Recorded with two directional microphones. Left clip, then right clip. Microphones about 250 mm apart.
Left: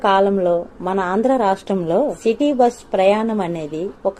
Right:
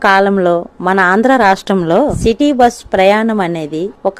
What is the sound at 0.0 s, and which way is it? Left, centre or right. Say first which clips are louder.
A woman's voice: right 5 dB; right.